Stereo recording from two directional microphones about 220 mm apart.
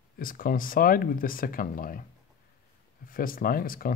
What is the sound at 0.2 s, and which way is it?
Speech, 40° left (ahead or behind).